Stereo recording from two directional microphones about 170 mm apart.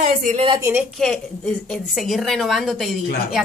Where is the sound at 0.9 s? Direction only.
Centre (ahead or behind).